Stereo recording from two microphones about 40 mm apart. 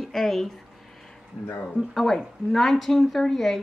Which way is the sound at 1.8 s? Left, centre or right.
Centre.